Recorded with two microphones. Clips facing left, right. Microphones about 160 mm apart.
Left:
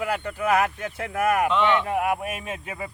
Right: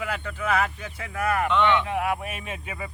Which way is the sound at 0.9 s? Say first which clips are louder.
Left 5 dB; 55° left (ahead or behind).